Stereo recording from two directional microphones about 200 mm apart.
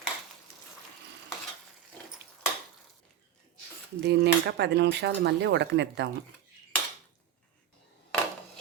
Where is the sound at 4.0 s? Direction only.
55° right (ahead or behind).